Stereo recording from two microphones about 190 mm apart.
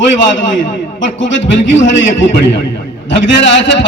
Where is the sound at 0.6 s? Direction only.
75° left (ahead or behind).